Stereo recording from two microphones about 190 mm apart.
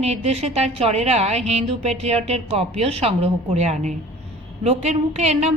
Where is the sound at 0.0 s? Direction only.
35° right (ahead or behind).